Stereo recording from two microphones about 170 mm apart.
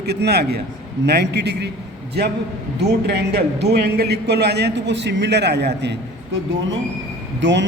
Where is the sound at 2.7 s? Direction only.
75° right (ahead or behind).